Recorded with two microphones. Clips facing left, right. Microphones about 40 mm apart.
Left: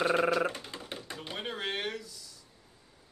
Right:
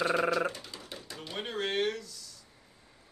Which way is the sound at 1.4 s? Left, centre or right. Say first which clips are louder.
Right 4 dB; centre.